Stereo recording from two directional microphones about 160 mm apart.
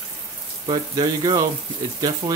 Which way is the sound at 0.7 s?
30° right (ahead or behind).